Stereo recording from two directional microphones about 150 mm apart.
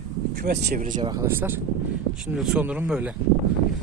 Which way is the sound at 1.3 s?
15° right (ahead or behind).